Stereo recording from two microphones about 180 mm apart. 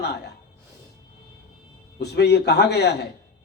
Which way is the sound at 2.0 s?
65° left (ahead or behind).